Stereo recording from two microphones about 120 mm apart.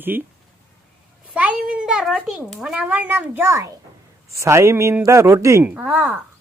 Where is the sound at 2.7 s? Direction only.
15° right (ahead or behind).